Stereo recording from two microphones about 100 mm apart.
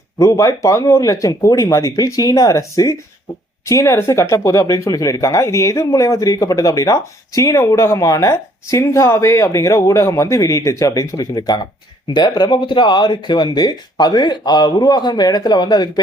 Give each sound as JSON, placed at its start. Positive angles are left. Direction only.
{"t": 0.2, "sound": "speech", "side_deg": 30}